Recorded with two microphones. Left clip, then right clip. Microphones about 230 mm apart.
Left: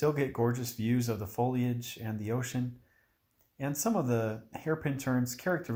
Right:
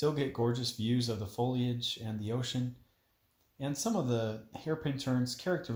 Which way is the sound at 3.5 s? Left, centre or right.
Left.